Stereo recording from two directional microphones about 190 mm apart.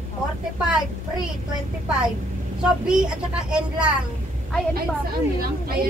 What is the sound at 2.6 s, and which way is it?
Speech, 5° right (ahead or behind).